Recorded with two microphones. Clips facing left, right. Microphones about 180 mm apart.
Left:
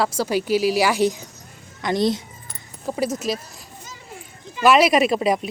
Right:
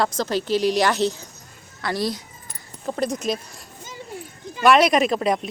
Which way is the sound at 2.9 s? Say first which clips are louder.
Even; 5° left (ahead or behind).